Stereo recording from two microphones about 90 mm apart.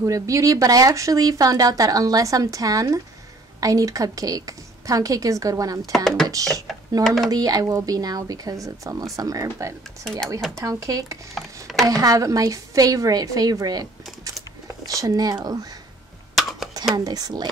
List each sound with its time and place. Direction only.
0.0 s speech: 35° right (ahead or behind)
5.8 s speech: 5° left (ahead or behind)
7.2 s a woman's voice: 45° right (ahead or behind)
11.3 s a sound: centre (ahead or behind)
11.8 s a woman's voice: 40° right (ahead or behind)
14.9 s a woman's voice: 40° right (ahead or behind)
16.3 s computer keyboard: 5° right (ahead or behind)
16.9 s a woman's voice: 45° right (ahead or behind)